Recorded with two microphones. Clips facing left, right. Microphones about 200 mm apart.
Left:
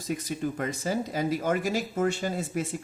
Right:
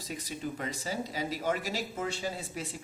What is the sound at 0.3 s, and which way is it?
Speech, 50° left (ahead or behind).